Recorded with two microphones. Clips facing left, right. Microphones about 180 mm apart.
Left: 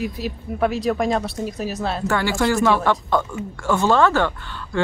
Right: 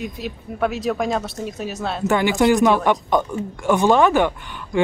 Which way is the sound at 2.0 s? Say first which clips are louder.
Right 5 dB; 20° right (ahead or behind).